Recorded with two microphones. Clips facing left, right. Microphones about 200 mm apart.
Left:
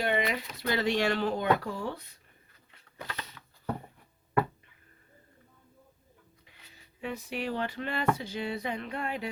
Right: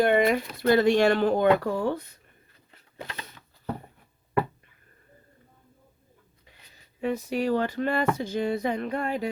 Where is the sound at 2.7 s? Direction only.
25° right (ahead or behind).